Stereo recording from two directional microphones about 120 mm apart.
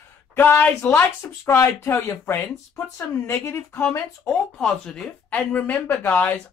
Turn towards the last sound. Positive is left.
turn(degrees=15)  # may be behind; listen again after turning